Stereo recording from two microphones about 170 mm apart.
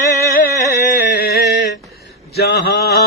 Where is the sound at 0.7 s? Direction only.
70° left (ahead or behind).